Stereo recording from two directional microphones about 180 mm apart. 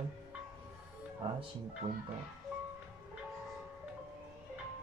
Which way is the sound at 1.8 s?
20° right (ahead or behind).